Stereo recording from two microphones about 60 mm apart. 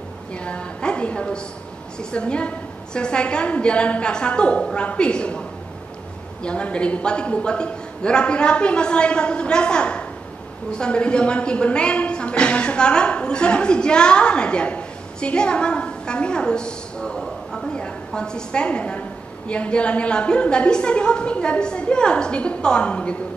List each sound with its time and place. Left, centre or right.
0.3 s a woman's voice: centre
6.4 s speech: centre